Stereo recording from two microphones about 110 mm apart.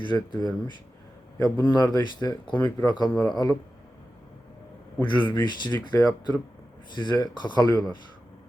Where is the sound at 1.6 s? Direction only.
40° left (ahead or behind).